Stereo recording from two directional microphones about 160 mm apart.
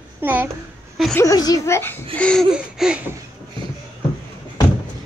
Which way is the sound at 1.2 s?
25° left (ahead or behind).